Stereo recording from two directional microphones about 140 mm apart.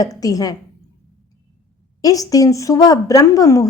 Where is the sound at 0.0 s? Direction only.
25° left (ahead or behind).